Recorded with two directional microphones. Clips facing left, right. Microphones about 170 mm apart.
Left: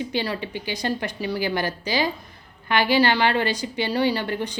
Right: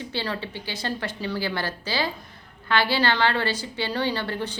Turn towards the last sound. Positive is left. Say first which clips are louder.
# left 3 dB
turn(degrees=15)  # may be behind; listen again after turning